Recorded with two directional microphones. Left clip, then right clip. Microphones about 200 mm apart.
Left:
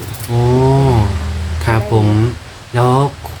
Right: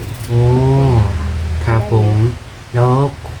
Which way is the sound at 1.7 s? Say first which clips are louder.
Left 3 dB; 55° left (ahead or behind).